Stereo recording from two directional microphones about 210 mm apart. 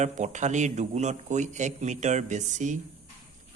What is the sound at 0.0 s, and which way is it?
A man's voice, 35° right (ahead or behind).